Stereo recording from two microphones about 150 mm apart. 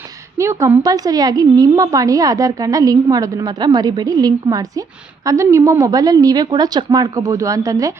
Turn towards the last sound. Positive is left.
turn(degrees=-25)  # may be behind; listen again after turning